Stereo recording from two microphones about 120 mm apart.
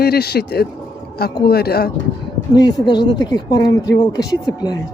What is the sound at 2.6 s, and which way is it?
Speech, 35° left (ahead or behind).